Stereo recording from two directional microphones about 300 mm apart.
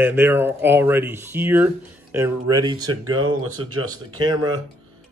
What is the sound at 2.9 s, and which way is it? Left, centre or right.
Speech, right.